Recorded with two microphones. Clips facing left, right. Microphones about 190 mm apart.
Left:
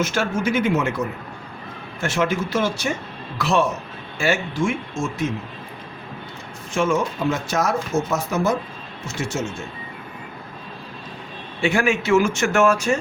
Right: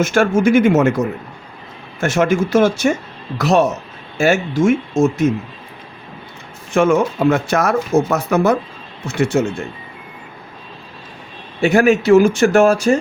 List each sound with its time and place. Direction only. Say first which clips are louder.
0.0 s speech: right 8 dB; 50° right (ahead or behind)
6.7 s speech: right 7 dB; 60° right (ahead or behind)
11.6 s speech: right 8 dB; 40° right (ahead or behind)